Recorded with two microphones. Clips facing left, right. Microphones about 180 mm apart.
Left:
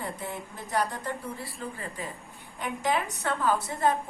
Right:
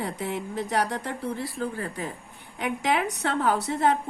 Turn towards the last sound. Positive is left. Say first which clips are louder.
# right 3 dB
turn(degrees=-70)  # may be behind; listen again after turning